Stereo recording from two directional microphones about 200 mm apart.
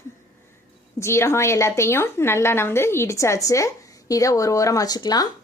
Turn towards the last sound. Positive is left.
turn(degrees=20)  # may be behind; listen again after turning